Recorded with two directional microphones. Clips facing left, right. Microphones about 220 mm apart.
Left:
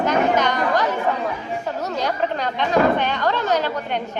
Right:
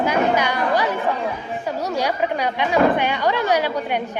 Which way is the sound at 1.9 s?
10° right (ahead or behind).